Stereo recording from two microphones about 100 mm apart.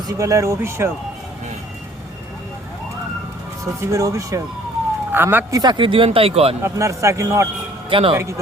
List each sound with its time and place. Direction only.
0.1 s speech: 35° right (ahead or behind)
3.6 s speech: 30° right (ahead or behind)
5.1 s speech: 20° right (ahead or behind)
5.5 s speech: 45° right (ahead or behind); by 6.6 s 80° right
6.6 s speech: 30° right (ahead or behind)
7.9 s speech: 65° right (ahead or behind)
8.1 s speech: 30° right (ahead or behind)